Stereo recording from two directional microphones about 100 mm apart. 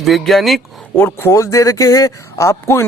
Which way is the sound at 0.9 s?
20° left (ahead or behind).